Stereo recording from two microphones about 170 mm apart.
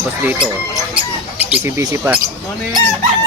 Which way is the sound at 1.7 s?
15° right (ahead or behind).